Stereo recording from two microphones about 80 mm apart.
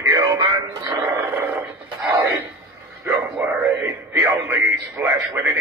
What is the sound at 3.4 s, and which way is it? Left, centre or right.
Speech, right.